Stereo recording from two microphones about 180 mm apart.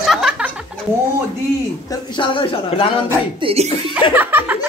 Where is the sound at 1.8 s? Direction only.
25° left (ahead or behind).